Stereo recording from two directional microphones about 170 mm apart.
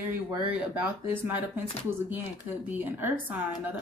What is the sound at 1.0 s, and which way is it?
Speech, 10° right (ahead or behind).